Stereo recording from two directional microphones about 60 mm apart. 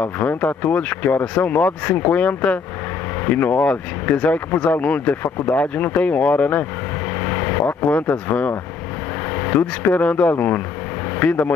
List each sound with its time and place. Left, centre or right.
0.0 s speech: left
7.2 s vehicle: left
7.9 s speech: left